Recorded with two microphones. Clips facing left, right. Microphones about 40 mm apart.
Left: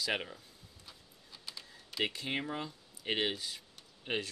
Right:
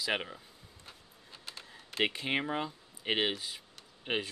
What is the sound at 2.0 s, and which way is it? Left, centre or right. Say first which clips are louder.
Speech: right 4 dB; right.